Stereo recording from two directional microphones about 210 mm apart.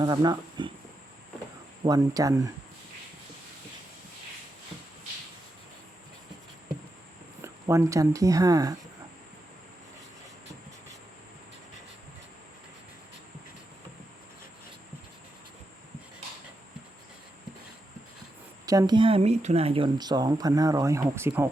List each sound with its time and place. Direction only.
0.0 s speech: 20° right (ahead or behind)
1.8 s speech: 15° right (ahead or behind)
7.4 s speech: 15° right (ahead or behind)
18.6 s speech: 15° right (ahead or behind)